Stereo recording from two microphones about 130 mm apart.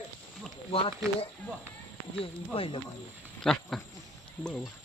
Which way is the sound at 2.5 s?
45° left (ahead or behind).